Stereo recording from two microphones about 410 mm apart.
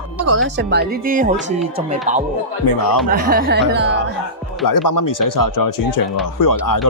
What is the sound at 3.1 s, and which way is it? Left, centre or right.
Speech, right.